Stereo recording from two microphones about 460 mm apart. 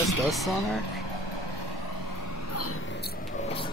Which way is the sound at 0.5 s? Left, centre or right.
Left.